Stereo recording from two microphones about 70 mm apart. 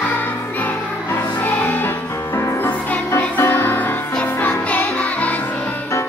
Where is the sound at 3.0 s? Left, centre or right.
Left.